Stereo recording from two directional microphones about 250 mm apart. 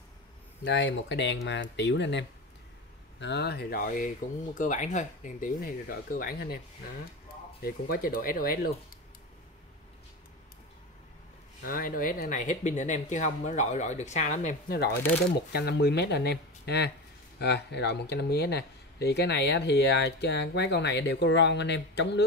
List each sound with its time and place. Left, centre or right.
0.7 s speech: left
7.6 s speech: left
11.6 s speech: left